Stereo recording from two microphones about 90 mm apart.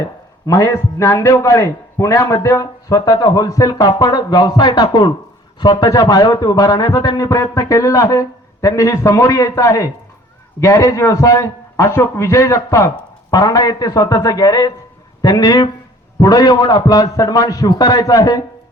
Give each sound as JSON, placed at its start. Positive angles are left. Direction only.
{"t": 0.4, "sound": "a man's voice", "side_deg": 35}
{"t": 13.3, "sound": "a man's voice", "side_deg": 45}